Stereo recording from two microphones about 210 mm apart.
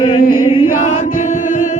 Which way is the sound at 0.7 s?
40° left (ahead or behind).